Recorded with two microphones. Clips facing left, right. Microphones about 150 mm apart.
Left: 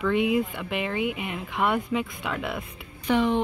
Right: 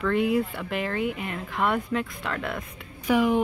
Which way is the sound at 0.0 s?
5° left (ahead or behind).